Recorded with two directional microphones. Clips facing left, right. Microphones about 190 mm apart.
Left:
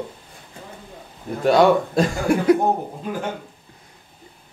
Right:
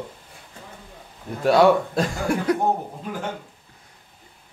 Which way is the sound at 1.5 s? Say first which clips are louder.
Left 1 dB; 5° right (ahead or behind).